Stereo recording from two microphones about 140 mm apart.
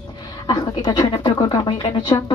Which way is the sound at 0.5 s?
30° left (ahead or behind).